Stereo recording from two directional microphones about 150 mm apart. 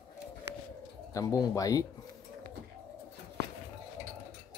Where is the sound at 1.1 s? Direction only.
20° left (ahead or behind).